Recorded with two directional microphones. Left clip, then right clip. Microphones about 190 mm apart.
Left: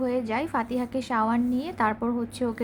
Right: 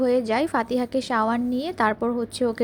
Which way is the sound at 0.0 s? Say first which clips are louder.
Right 6 dB; 25° right (ahead or behind).